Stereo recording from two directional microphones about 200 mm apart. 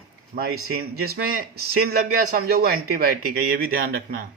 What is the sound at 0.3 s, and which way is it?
Speech, 45° right (ahead or behind).